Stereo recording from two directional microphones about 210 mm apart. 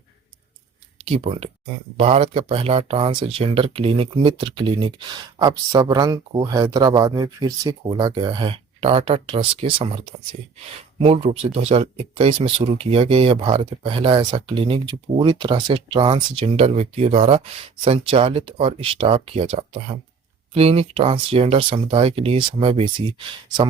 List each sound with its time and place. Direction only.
1.0 s speech: 30° right (ahead or behind)
11.0 s speech: 30° right (ahead or behind)